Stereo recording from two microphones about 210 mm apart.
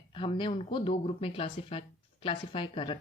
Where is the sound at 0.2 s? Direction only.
25° left (ahead or behind).